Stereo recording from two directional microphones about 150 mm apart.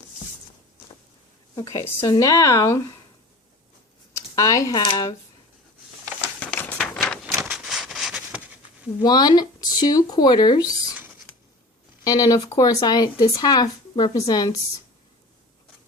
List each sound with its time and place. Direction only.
1.5 s speech: 20° left (ahead or behind)
4.1 s speech: 20° left (ahead or behind)
6.4 s a sound: 10° left (ahead or behind)
9.0 s speech: 25° left (ahead or behind)
12.0 s speech: 25° left (ahead or behind)